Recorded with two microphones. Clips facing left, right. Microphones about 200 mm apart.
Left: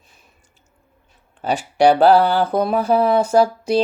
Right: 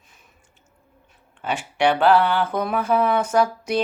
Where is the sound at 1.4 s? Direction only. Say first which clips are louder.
Left 6 dB; 35° left (ahead or behind).